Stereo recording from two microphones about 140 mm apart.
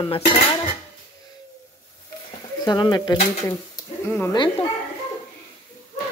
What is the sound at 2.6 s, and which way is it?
Speech, 30° left (ahead or behind).